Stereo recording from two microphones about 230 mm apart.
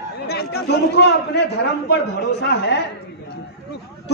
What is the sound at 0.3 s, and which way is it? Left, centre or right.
Chatter, left.